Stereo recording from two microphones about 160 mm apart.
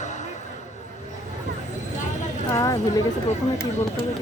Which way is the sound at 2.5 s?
20° left (ahead or behind).